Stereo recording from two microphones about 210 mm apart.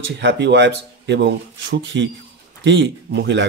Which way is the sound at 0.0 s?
60° right (ahead or behind).